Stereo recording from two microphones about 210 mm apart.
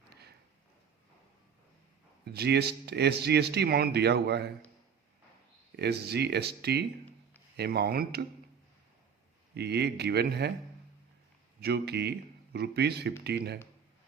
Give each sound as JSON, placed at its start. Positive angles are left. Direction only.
{"t": 2.2, "sound": "speech", "side_deg": -50}
{"t": 5.7, "sound": "speech", "side_deg": -50}
{"t": 9.6, "sound": "speech", "side_deg": -50}
{"t": 11.6, "sound": "speech", "side_deg": -50}